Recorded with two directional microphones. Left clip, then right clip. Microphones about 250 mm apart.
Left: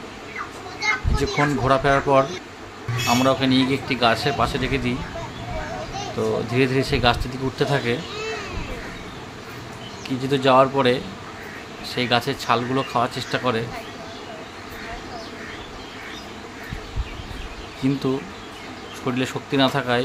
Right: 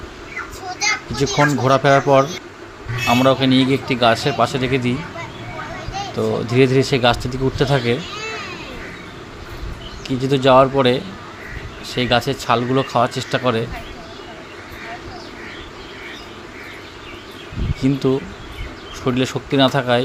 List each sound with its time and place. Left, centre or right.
1.1 s a man's voice: centre
6.5 s a man's voice: centre
10.2 s a man's voice: centre
17.8 s a man's voice: centre
19.0 s a man's voice: centre